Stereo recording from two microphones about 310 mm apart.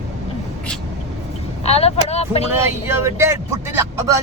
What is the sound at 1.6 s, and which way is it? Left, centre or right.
Vehicle, centre.